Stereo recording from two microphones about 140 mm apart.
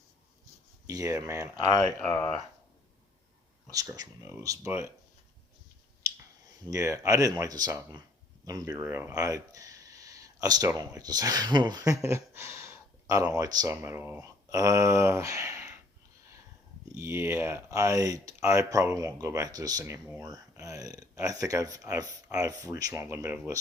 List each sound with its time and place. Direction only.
0.9 s speech: 25° right (ahead or behind)
2.0 s speech: 5° left (ahead or behind)
3.7 s speech: 25° right (ahead or behind)
6.7 s speech: 25° right (ahead or behind)
8.8 s speech: 15° right (ahead or behind)
16.9 s speech: 20° right (ahead or behind)